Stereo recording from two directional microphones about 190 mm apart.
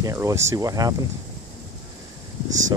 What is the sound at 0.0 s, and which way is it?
Speech, 15° right (ahead or behind).